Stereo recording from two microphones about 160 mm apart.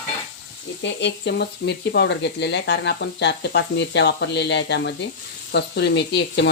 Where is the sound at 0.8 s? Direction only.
90° left.